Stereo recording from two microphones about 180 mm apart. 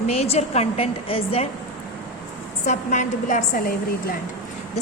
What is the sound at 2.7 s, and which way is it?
A woman's voice, 45° left (ahead or behind).